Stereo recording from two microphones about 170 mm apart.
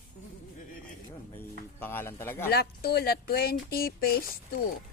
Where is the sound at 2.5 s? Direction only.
65° left (ahead or behind).